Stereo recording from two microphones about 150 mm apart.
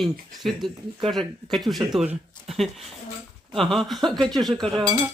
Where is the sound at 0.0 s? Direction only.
Centre (ahead or behind).